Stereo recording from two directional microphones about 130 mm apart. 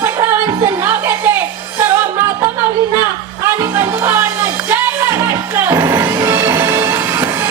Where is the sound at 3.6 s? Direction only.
20° right (ahead or behind).